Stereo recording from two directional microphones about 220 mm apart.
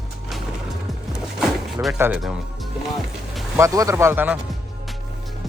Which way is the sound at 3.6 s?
15° right (ahead or behind).